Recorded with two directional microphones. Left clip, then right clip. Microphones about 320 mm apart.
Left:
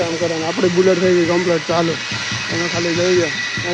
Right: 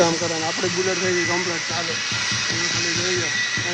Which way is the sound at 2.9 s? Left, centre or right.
Centre.